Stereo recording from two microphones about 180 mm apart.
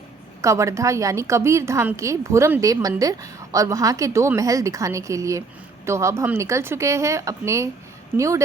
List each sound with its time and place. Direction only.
0.4 s a woman's voice: 15° right (ahead or behind)